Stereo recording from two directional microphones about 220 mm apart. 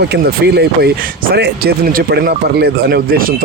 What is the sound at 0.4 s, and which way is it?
Speech, 45° right (ahead or behind).